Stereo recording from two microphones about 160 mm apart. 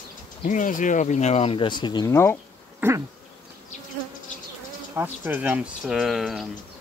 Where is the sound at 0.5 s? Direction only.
55° left (ahead or behind); by 2.3 s 20° left (ahead or behind).